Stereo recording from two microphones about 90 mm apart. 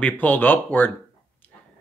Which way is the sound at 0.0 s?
20° left (ahead or behind).